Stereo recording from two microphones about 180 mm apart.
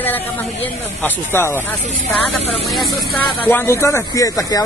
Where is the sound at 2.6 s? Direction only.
Centre (ahead or behind).